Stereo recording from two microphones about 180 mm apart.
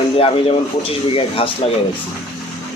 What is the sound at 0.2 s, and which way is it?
Speech, 30° left (ahead or behind).